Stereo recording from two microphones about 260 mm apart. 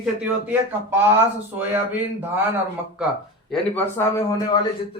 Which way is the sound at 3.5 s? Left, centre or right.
Centre.